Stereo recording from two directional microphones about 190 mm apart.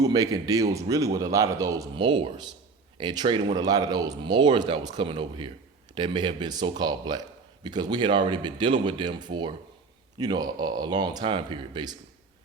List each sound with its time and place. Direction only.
0.0 s a man's voice: 20° right (ahead or behind)